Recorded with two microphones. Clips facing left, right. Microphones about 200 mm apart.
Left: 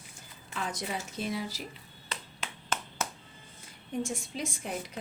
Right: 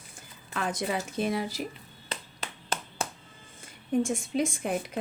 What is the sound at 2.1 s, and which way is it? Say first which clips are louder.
Clapping: right 2 dB; 35° right (ahead or behind).